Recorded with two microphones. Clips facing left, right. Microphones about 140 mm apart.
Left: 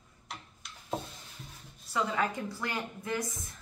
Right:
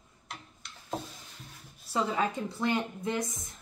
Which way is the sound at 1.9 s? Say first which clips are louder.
Right 2 dB; 25° right (ahead or behind).